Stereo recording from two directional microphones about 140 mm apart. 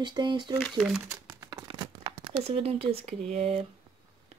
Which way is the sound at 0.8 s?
5° right (ahead or behind).